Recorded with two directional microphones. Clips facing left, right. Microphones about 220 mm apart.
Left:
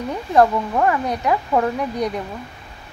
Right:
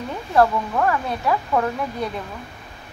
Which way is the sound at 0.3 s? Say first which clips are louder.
Left 2 dB; 15° left (ahead or behind).